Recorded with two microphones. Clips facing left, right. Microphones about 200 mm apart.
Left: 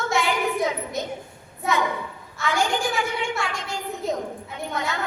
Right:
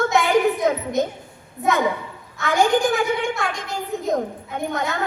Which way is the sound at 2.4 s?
50° right (ahead or behind).